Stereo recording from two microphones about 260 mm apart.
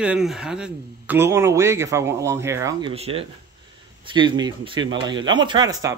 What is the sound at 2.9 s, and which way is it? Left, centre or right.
Speech, right.